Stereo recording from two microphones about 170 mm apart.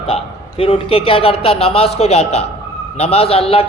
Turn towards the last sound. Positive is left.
turn(degrees=35)  # may be behind; listen again after turning